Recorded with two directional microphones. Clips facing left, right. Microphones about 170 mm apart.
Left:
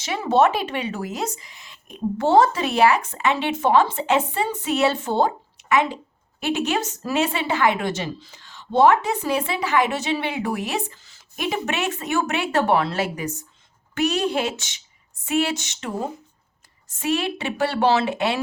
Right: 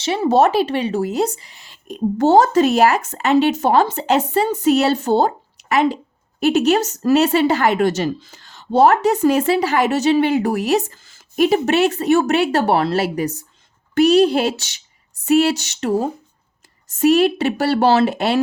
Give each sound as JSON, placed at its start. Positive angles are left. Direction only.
{"t": 0.0, "sound": "a woman's voice", "side_deg": -30}